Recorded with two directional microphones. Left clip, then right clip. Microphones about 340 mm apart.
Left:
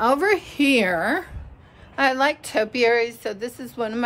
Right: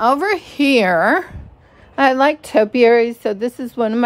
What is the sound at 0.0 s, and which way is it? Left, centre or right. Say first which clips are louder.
A woman's voice: right 3 dB; centre.